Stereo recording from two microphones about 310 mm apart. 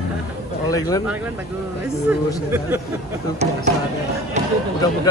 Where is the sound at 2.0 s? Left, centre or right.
Centre.